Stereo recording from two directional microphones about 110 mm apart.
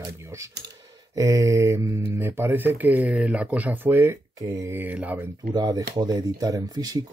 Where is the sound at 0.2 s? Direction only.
25° right (ahead or behind).